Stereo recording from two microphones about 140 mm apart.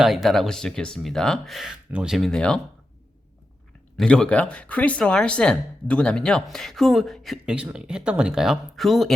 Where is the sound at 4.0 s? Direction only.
5° left (ahead or behind).